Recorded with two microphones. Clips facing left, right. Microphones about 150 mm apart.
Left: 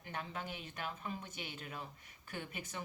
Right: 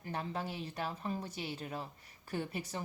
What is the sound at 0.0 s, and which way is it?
Speech, 35° right (ahead or behind).